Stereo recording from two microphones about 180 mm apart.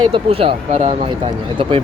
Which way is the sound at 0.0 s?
30° right (ahead or behind).